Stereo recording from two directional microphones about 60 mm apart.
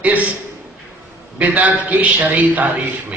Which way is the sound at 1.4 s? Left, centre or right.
Right.